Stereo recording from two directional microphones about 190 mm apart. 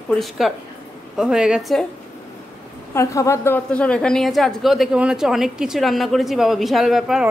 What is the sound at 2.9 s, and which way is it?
A woman's voice, 15° left (ahead or behind).